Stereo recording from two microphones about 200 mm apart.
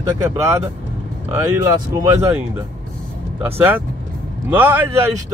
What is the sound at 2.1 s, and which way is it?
Speech, 15° right (ahead or behind).